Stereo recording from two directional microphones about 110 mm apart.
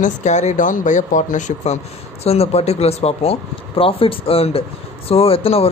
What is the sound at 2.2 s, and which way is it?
Speech, 70° left (ahead or behind).